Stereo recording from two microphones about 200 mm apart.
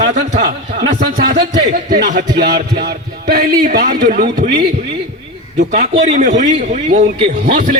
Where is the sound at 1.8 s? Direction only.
40° right (ahead or behind).